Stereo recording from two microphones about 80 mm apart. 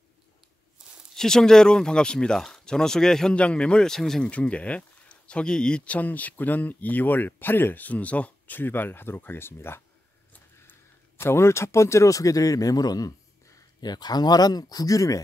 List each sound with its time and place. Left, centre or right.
1.1 s speech: centre
4.3 s speech: centre; by 15.2 s left